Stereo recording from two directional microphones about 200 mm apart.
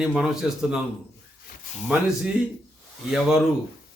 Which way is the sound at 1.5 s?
50° left (ahead or behind).